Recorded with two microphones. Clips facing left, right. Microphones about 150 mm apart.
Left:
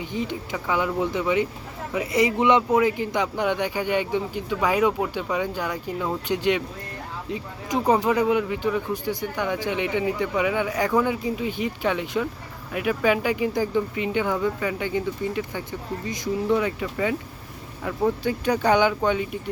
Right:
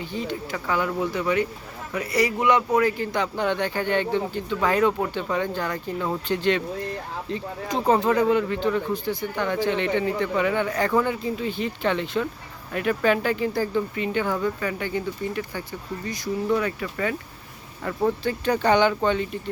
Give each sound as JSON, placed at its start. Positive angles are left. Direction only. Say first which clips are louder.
{"t": 0.0, "sound": "speech", "louder": "left 1 dB", "side_deg": 20}